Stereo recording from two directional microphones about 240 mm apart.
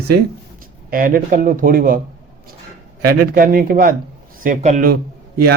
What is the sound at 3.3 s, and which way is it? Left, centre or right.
A man's voice, right.